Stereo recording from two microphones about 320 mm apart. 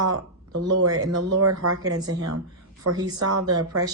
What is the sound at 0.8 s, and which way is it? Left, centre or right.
Speech, right.